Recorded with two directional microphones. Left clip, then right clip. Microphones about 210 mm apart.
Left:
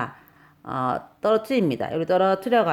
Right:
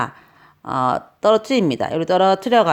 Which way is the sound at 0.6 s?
25° right (ahead or behind).